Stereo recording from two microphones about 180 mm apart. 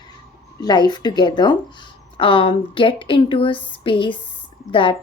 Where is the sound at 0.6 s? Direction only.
25° left (ahead or behind).